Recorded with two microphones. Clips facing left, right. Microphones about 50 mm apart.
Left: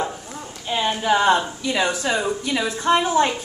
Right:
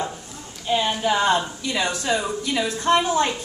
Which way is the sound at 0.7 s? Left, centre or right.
Centre.